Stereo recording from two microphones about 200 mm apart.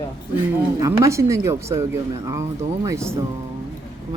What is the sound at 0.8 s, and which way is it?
Speech, 15° right (ahead or behind).